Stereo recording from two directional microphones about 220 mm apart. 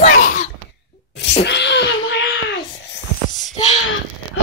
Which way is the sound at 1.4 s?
50° left (ahead or behind).